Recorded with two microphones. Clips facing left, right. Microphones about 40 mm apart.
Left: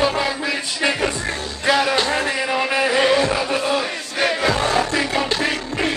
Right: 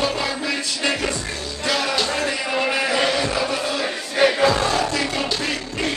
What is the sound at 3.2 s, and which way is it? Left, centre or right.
Music, centre.